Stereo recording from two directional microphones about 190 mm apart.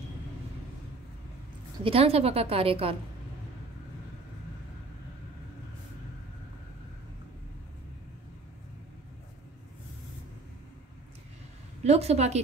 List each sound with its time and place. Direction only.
1.9 s a woman's voice: 30° right (ahead or behind)
11.8 s a woman's voice: 35° right (ahead or behind)